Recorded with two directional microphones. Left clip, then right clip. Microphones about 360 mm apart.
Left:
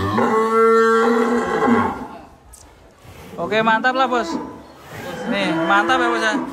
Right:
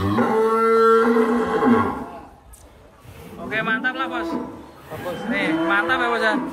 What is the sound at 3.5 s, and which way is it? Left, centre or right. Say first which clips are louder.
A man's voice: left 6 dB; centre.